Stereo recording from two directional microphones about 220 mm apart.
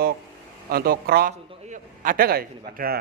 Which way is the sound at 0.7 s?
45° right (ahead or behind).